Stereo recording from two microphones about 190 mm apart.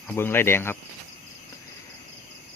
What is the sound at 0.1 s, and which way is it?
Speech, 10° left (ahead or behind).